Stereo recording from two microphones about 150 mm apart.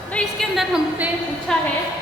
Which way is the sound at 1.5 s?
5° left (ahead or behind).